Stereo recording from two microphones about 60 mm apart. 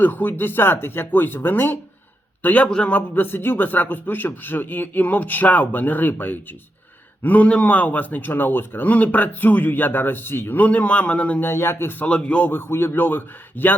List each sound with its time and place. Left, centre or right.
0.0 s a man's voice: left
2.6 s a man's voice: centre
2.9 s a man's voice: left
11.3 s a man's voice: left
12.0 s a man's voice: left
12.5 s a man's voice: left